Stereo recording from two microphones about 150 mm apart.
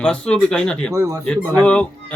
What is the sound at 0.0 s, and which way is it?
Speech, 5° left (ahead or behind).